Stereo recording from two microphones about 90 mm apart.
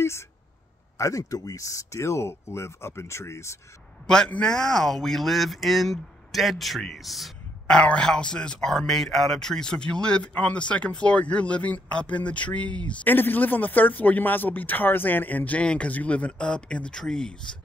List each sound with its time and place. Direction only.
0.0 s speech: 30° left (ahead or behind)
4.1 s speech: 10° left (ahead or behind)
7.7 s speech: 10° left (ahead or behind)